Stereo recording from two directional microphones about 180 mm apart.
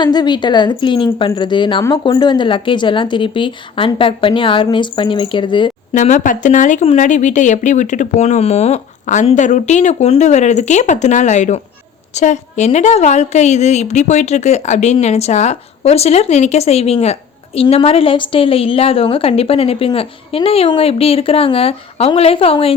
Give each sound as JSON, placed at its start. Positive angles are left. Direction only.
{"t": 0.0, "sound": "a woman's voice", "side_deg": 25}
{"t": 5.9, "sound": "a woman's voice", "side_deg": 45}